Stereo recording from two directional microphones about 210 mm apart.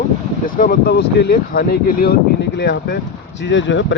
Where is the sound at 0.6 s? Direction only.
45° left (ahead or behind).